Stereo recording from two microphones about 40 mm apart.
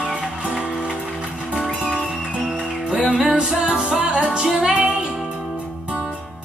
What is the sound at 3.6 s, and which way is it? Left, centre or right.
Music, right.